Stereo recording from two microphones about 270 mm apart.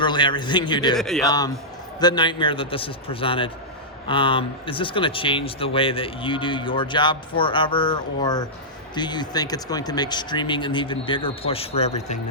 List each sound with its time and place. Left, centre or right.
0.0 s speech: centre
0.9 s speech: centre
2.0 s speech: centre